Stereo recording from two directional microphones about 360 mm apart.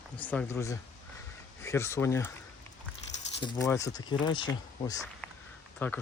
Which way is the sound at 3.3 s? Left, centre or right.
Centre.